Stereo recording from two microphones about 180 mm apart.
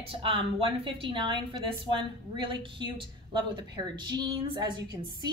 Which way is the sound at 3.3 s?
25° right (ahead or behind).